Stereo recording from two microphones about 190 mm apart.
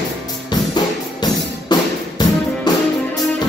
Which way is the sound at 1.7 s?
20° left (ahead or behind).